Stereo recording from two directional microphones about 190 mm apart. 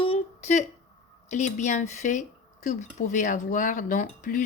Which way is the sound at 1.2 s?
40° left (ahead or behind).